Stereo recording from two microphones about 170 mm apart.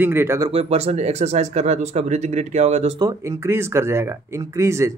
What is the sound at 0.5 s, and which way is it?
Speech, 40° right (ahead or behind).